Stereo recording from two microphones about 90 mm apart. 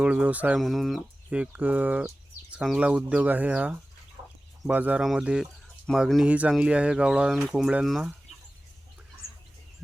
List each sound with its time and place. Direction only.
0.0 s speech: 10° right (ahead or behind)
0.5 s speech: centre (ahead or behind)
1.3 s speech: 15° right (ahead or behind)
5.4 s bird: 5° left (ahead or behind)
6.2 s speech: 15° right (ahead or behind)